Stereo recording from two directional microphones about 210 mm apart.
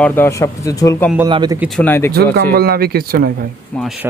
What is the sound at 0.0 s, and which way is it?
Speech, 10° left (ahead or behind).